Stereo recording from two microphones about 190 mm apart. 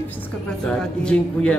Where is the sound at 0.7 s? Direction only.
5° left (ahead or behind).